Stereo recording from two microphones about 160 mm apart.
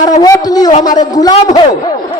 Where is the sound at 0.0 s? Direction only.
25° left (ahead or behind).